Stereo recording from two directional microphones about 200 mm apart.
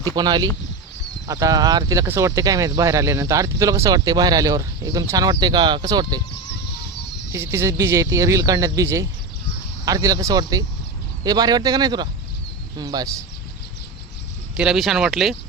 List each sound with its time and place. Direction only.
0.0 s speech: 20° right (ahead or behind)
7.3 s speech: 15° right (ahead or behind)
14.5 s speech: 5° right (ahead or behind)